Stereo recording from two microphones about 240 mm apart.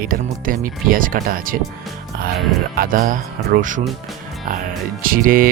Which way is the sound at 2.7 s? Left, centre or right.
Right.